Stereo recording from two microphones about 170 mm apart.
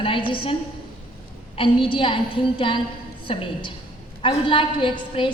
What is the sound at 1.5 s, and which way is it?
A woman's voice, 30° left (ahead or behind).